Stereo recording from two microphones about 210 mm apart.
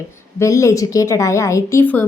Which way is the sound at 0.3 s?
15° left (ahead or behind).